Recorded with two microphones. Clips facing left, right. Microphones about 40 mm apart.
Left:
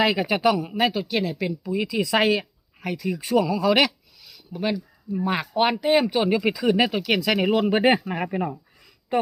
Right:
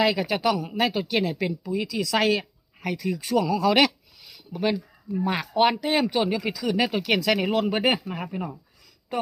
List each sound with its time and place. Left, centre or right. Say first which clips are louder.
0.0 s speech: left 2 dB; centre
1.9 s speech: left 2 dB; centre
2.4 s speech: even; centre
6.3 s speech: left 5 dB; centre
6.9 s speech: left 1 dB; centre
7.9 s speech: left 5 dB; left